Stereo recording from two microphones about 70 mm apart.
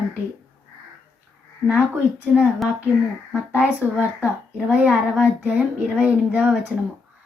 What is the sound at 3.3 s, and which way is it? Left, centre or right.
Speech, right.